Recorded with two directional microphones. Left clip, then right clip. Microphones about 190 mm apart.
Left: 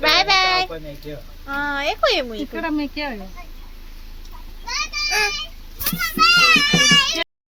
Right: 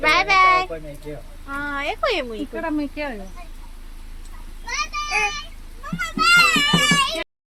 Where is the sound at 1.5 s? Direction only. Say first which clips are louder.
Left 3 dB; 10° left (ahead or behind).